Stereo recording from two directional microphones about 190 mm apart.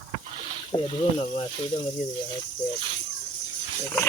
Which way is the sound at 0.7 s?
30° left (ahead or behind).